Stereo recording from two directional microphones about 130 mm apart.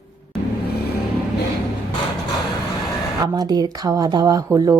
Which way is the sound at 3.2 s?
30° right (ahead or behind).